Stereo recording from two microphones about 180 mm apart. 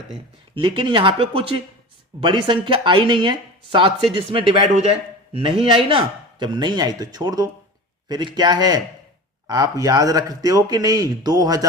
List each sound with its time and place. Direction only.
0.5 s speech: 25° right (ahead or behind)